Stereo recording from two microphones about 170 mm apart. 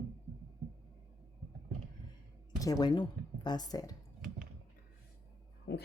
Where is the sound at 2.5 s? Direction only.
20° left (ahead or behind).